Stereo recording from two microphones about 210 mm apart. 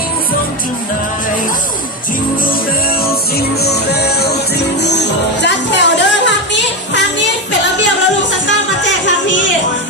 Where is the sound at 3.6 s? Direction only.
50° left (ahead or behind).